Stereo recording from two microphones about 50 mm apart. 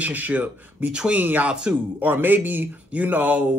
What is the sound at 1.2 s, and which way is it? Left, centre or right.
A man's voice, right.